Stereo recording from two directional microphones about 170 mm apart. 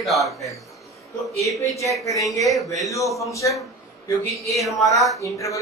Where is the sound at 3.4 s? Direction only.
20° left (ahead or behind).